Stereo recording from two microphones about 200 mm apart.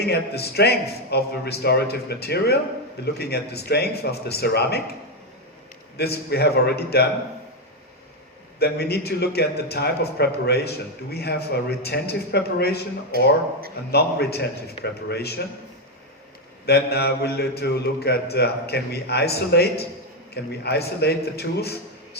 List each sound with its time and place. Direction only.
0.0 s a man's voice: 55° left (ahead or behind)
6.0 s a man's voice: 55° left (ahead or behind)
8.5 s a man's voice: 50° left (ahead or behind)
13.9 s a man's voice: 55° left (ahead or behind)
16.6 s a man's voice: 55° left (ahead or behind)